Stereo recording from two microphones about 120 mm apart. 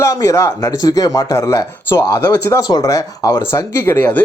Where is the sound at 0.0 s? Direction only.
30° left (ahead or behind).